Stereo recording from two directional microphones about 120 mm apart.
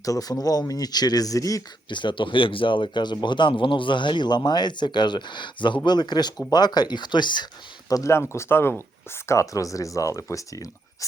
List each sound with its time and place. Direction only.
0.0 s speech: 30° left (ahead or behind)
1.9 s speech: 40° left (ahead or behind)
7.9 s speech: 25° left (ahead or behind)